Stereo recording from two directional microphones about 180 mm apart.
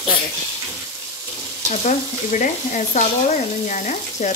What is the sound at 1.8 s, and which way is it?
Stir, 45° left (ahead or behind).